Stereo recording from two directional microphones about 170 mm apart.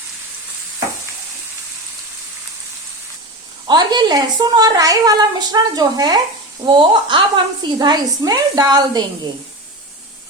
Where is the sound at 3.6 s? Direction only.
25° right (ahead or behind).